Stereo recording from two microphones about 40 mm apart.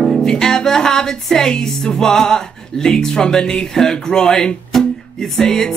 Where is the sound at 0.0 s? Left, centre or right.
Centre.